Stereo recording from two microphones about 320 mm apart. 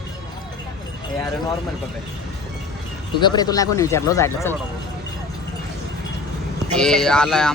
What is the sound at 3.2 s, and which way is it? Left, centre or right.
Speech, centre.